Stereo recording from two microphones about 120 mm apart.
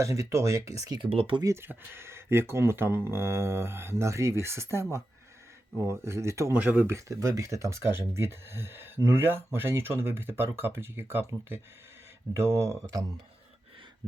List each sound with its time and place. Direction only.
0.0 s speech: 25° right (ahead or behind)
1.0 s speech: 50° right (ahead or behind)
1.6 s speech: 20° right (ahead or behind)
6.6 s speech: 15° right (ahead or behind)